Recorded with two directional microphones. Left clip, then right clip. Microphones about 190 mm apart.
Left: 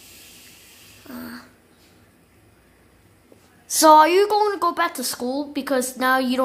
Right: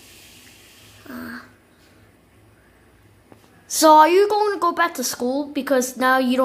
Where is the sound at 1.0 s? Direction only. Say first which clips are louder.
Right 3 dB; centre (ahead or behind).